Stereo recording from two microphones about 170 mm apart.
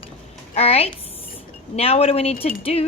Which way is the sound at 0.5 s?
35° left (ahead or behind).